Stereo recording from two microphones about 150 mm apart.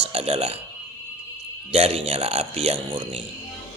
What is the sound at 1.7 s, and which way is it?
Speech, 40° right (ahead or behind).